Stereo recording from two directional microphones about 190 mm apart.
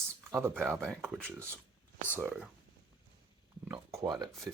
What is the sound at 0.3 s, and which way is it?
Speech, 15° right (ahead or behind).